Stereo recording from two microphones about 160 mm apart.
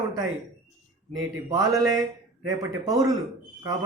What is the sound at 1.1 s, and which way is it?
A man's voice, 20° right (ahead or behind).